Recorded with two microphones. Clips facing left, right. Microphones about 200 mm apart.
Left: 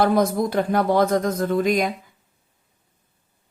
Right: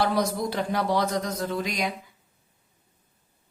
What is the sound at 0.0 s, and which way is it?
A woman's voice, 50° left (ahead or behind).